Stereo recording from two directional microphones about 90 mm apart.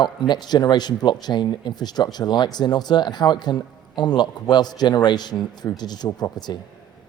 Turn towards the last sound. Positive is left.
turn(degrees=35)  # may be behind; listen again after turning